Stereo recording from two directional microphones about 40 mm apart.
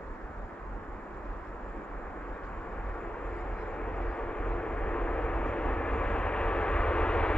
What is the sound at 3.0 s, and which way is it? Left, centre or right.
Vehicle, left.